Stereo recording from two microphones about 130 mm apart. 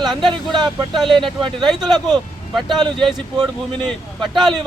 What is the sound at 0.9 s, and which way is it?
Speech, centre (ahead or behind).